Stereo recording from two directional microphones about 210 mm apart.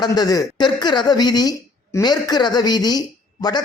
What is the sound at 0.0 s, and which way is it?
A woman's voice, 20° left (ahead or behind).